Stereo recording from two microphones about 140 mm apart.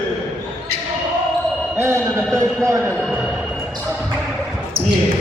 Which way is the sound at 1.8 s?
15° right (ahead or behind).